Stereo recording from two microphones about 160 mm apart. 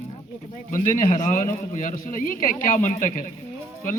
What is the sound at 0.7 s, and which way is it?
A man's voice, 55° left (ahead or behind).